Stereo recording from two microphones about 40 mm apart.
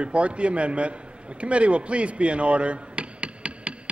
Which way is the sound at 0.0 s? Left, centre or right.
Right.